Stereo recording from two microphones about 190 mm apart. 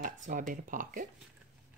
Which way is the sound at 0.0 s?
45° right (ahead or behind).